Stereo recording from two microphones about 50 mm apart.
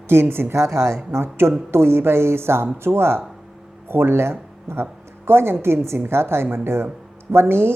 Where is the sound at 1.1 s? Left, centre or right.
Right.